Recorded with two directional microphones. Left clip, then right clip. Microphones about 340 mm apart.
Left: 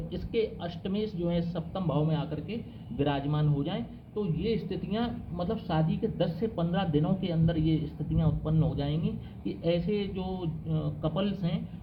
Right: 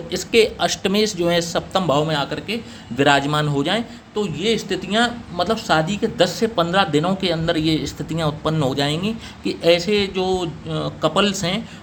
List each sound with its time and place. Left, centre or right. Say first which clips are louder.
0.3 s a man's voice: right 15 dB; right